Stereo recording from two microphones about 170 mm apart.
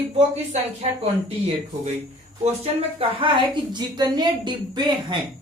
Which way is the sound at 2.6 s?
30° right (ahead or behind).